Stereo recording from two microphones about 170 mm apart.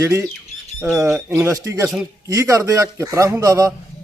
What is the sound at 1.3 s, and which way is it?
Speech, 15° right (ahead or behind).